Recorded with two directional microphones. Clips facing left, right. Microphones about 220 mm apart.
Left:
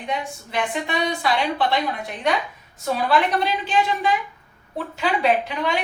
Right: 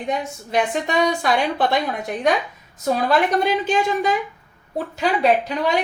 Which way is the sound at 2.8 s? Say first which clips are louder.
Right 2 dB; 45° right (ahead or behind).